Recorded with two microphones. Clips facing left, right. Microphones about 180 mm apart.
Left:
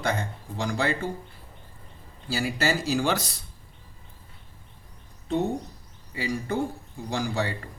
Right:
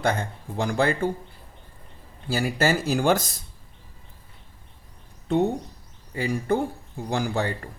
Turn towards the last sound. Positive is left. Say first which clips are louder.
# right 2 dB
turn(degrees=-50)  # may be behind; listen again after turning